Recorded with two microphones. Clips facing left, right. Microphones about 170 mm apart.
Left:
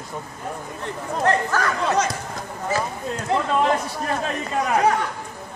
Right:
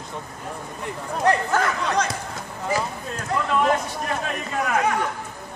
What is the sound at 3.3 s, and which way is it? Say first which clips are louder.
Speech: left 3 dB; 25° left (ahead or behind).